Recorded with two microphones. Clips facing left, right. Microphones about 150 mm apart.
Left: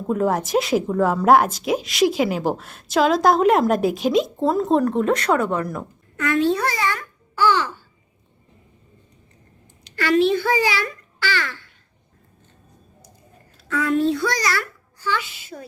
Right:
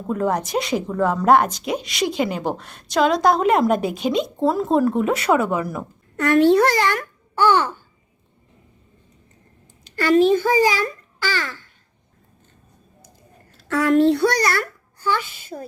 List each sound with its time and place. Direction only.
0.1 s a woman's voice: centre (ahead or behind)
6.2 s a child's voice: 65° right (ahead or behind)
7.3 s babbling: 55° right (ahead or behind)
9.9 s a child's voice: 40° right (ahead or behind)
13.7 s a child's voice: 75° right (ahead or behind); by 15.6 s 50° right (ahead or behind)